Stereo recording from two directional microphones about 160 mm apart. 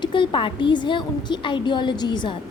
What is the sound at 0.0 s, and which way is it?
A woman's voice, 30° left (ahead or behind).